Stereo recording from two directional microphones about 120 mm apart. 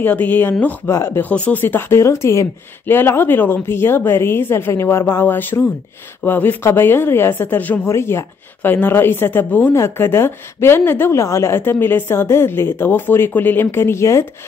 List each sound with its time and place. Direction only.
0.0 s a woman's voice: 15° left (ahead or behind)